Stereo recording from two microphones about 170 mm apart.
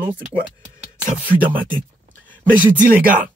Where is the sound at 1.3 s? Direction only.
10° right (ahead or behind).